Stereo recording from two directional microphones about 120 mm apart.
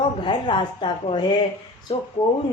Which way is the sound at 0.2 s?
40° left (ahead or behind).